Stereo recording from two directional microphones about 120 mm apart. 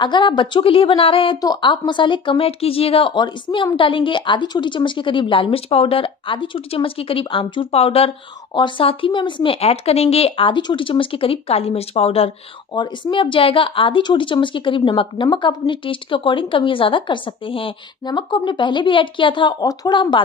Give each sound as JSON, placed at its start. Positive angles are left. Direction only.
{"t": 0.0, "sound": "speech", "side_deg": 40}
{"t": 1.4, "sound": "speech", "side_deg": 35}
{"t": 8.5, "sound": "speech", "side_deg": 45}
{"t": 12.7, "sound": "speech", "side_deg": 40}